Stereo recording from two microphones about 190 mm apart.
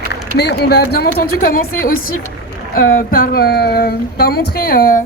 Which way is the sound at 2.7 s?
50° left (ahead or behind).